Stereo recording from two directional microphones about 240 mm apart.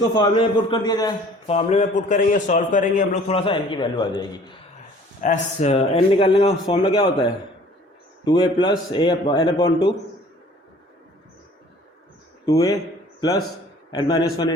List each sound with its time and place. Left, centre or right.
0.1 s a man's voice: centre
5.2 s a man's voice: left
12.5 s a man's voice: centre